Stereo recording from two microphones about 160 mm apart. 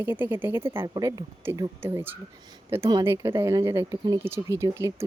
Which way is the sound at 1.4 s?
15° right (ahead or behind).